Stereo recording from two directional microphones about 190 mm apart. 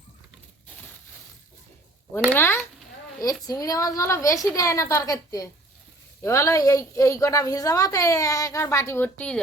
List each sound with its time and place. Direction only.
2.3 s a woman's voice: 10° left (ahead or behind)